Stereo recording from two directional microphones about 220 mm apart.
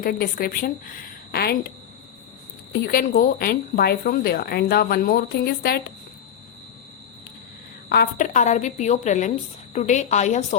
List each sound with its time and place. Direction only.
0.0 s a woman's voice: 40° left (ahead or behind)
2.7 s speech: 45° left (ahead or behind)
7.9 s a woman's voice: 40° left (ahead or behind)